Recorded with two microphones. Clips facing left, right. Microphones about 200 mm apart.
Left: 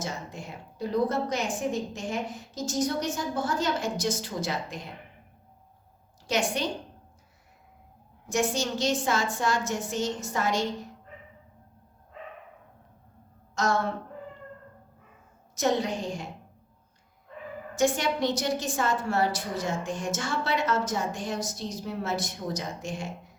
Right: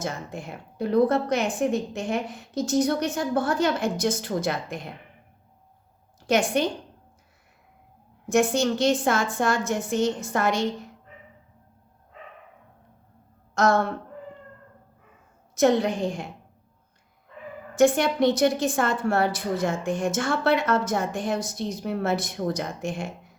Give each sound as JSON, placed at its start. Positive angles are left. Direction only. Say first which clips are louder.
{"t": 0.0, "sound": "a woman's voice", "louder": "right 4 dB", "side_deg": -55}
{"t": 6.2, "sound": "a woman's voice", "louder": "right 6 dB", "side_deg": -55}
{"t": 8.3, "sound": "a woman's voice", "louder": "right 6 dB", "side_deg": -55}
{"t": 13.5, "sound": "a woman's voice", "louder": "right 6 dB", "side_deg": -60}
{"t": 15.5, "sound": "a woman's voice", "louder": "right 6 dB", "side_deg": -60}
{"t": 17.7, "sound": "a woman's voice", "louder": "right 6 dB", "side_deg": -55}